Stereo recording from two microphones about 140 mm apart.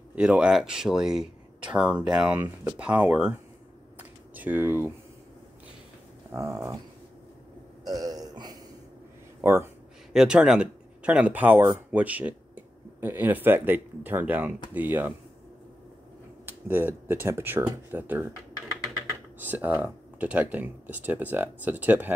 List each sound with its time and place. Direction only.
0.1 s speech: 10° right (ahead or behind)
4.4 s speech: 15° right (ahead or behind)
6.3 s speech: 20° right (ahead or behind)
8.0 s burping: 25° right (ahead or behind)
9.4 s speech: 15° right (ahead or behind)
10.1 s speech: 5° right (ahead or behind)
16.4 s speech: 15° right (ahead or behind)
19.3 s speech: 15° right (ahead or behind)